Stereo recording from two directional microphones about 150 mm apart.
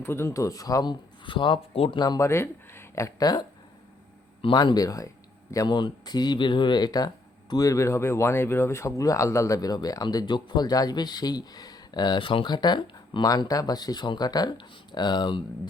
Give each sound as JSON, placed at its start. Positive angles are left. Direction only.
{"t": 0.0, "sound": "speech", "side_deg": 15}
{"t": 4.4, "sound": "speech", "side_deg": 30}